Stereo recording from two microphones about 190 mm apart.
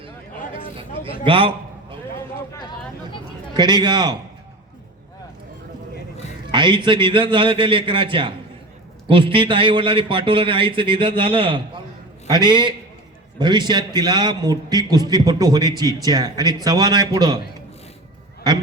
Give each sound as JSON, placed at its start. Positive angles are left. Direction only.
{"t": 1.0, "sound": "a sound", "side_deg": -30}
{"t": 3.6, "sound": "a man's voice", "side_deg": -25}
{"t": 6.5, "sound": "a man's voice", "side_deg": -25}